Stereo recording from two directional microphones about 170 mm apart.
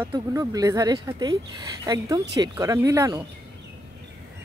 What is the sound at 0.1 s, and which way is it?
Speech, 20° right (ahead or behind).